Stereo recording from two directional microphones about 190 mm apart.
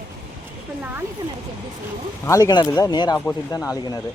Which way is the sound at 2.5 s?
20° left (ahead or behind).